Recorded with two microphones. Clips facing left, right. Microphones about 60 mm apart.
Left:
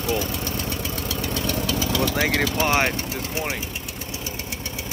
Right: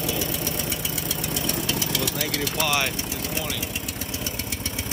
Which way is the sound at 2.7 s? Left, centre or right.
Left.